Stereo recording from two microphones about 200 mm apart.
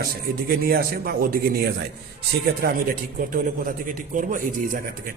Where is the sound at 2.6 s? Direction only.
50° right (ahead or behind).